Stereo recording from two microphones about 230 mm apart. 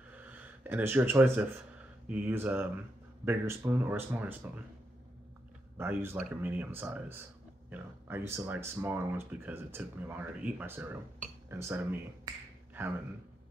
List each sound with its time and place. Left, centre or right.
0.1 s a sound: centre
2.0 s speech: centre
5.8 s speech: centre